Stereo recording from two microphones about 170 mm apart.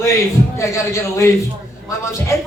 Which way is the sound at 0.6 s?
15° left (ahead or behind).